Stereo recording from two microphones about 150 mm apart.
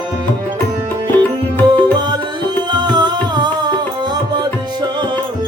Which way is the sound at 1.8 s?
30° right (ahead or behind).